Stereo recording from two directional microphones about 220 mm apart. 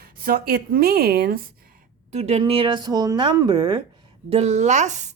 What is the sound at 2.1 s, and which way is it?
Speech, 30° right (ahead or behind).